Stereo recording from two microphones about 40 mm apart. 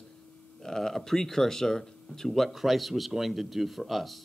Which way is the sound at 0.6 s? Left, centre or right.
Centre.